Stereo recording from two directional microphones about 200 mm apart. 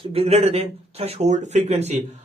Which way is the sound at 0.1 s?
30° right (ahead or behind).